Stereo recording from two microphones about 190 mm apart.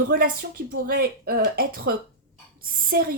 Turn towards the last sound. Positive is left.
turn(degrees=-55)  # may be behind; listen again after turning